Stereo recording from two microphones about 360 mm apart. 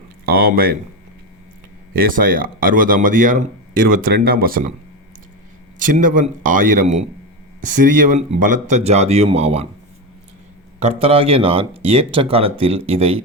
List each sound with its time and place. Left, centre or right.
0.3 s speech: right
1.9 s speech: right
5.8 s speech: right
10.8 s speech: centre